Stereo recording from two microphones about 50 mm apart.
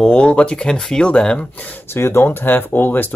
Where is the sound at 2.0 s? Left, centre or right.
Left.